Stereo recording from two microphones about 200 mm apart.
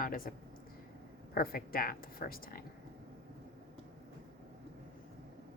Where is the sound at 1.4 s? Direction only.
45° left (ahead or behind).